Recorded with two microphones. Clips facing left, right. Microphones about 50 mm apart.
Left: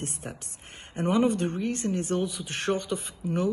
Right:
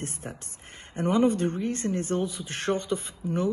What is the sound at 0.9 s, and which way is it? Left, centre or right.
Speech, left.